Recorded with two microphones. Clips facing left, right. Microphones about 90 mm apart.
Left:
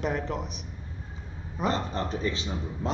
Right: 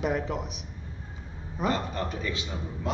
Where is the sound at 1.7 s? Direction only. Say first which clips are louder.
Left 1 dB; 30° left (ahead or behind).